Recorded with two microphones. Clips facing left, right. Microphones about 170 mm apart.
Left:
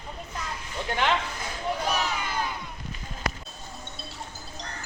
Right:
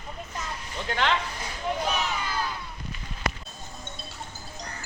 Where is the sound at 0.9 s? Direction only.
10° left (ahead or behind).